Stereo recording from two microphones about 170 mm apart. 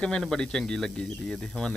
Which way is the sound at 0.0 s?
5° left (ahead or behind).